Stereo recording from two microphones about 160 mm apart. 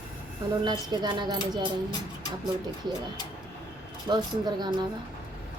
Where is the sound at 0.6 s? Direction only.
25° right (ahead or behind).